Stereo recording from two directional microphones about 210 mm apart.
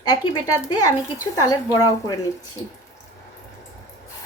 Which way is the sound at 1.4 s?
15° left (ahead or behind).